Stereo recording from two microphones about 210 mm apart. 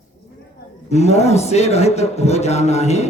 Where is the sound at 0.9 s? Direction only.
30° left (ahead or behind).